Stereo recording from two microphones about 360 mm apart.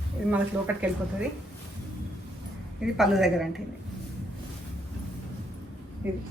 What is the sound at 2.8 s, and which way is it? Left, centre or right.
Speech, centre.